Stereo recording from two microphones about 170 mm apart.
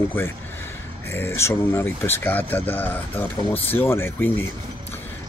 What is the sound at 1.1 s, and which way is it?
Speech, 15° left (ahead or behind).